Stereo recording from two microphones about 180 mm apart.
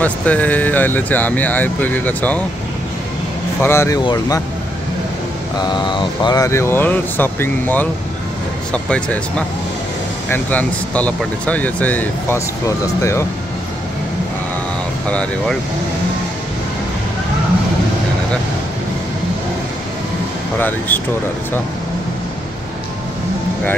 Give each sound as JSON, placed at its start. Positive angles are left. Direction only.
{"t": 0.0, "sound": "speech", "side_deg": 10}
{"t": 3.6, "sound": "speech", "side_deg": 15}
{"t": 5.6, "sound": "speech", "side_deg": 25}
{"t": 10.3, "sound": "speech", "side_deg": 10}
{"t": 15.0, "sound": "speech", "side_deg": 5}
{"t": 20.5, "sound": "speech", "side_deg": 10}